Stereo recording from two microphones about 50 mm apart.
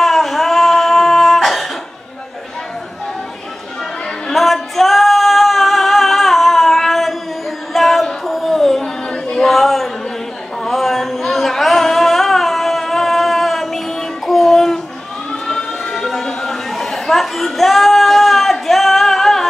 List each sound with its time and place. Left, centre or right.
0.0 s singing: centre
4.3 s female singing: centre
7.7 s music: centre
9.1 s female singing: centre
9.5 s a sound: centre
10.6 s music: centre
15.4 s chatter: centre